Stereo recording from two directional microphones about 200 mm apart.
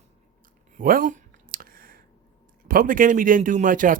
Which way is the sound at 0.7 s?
40° right (ahead or behind).